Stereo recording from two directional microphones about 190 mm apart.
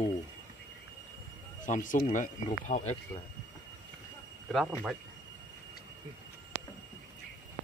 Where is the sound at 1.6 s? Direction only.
40° left (ahead or behind).